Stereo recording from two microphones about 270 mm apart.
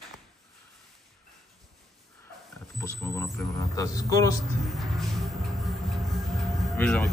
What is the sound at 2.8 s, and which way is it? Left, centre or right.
Speech, centre.